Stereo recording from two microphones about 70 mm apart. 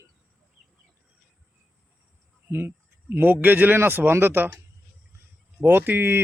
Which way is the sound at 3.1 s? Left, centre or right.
Right.